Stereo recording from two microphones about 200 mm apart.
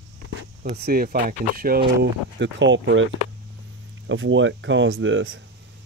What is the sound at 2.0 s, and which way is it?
Speech, 65° right (ahead or behind).